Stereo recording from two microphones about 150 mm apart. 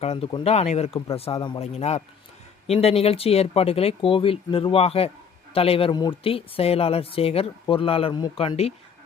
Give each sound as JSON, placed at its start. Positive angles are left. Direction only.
{"t": 0.0, "sound": "speech", "side_deg": 40}